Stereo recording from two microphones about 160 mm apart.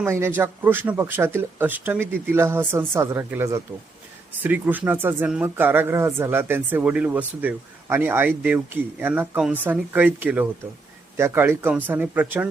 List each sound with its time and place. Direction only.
0.0 s speech: 15° right (ahead or behind)